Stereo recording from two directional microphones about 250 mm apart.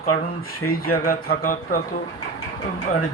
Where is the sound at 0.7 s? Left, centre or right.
Left.